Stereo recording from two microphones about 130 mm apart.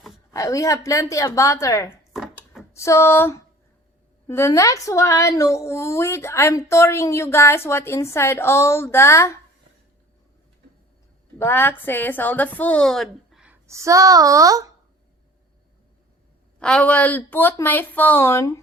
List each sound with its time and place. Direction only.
0.3 s speech: 25° left (ahead or behind)
2.1 s wood: centre (ahead or behind)
2.7 s speech: 20° left (ahead or behind)
11.3 s speech: 20° left (ahead or behind)
13.7 s a child's voice: 25° right (ahead or behind)
16.6 s speech: 5° left (ahead or behind); by 18.6 s 20° left (ahead or behind)